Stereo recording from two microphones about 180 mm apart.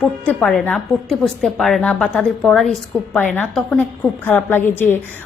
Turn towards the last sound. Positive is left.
turn(degrees=10)  # may be behind; listen again after turning